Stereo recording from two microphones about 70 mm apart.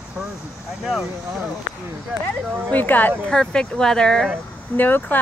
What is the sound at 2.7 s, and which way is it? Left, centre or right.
Speech, left.